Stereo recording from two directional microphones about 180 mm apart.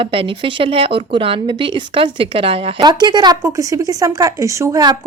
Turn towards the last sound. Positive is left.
turn(degrees=-20)  # may be behind; listen again after turning